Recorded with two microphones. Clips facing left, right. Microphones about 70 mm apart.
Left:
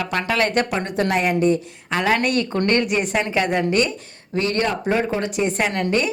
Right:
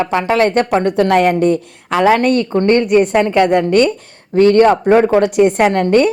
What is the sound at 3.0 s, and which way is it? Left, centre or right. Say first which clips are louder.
Speech: right 9 dB; right.